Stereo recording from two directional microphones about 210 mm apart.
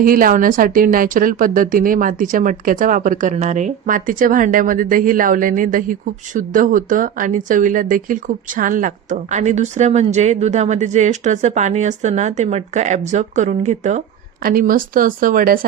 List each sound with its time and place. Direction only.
0.0 s a woman's voice: 40° right (ahead or behind)